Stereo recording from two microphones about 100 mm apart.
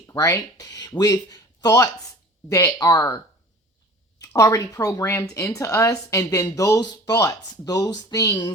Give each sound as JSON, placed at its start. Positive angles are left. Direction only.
{"t": 0.1, "sound": "speech", "side_deg": 35}
{"t": 4.4, "sound": "speech", "side_deg": 35}